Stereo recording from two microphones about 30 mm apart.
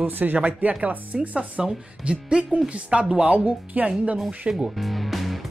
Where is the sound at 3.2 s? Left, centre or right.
Right.